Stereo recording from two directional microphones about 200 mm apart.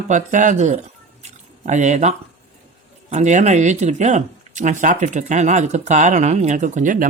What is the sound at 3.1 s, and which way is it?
Speech, 35° right (ahead or behind).